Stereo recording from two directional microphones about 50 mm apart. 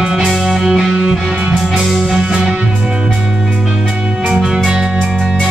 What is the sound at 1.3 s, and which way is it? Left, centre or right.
Music, right.